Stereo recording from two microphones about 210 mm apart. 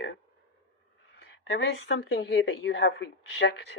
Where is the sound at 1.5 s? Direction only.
55° left (ahead or behind).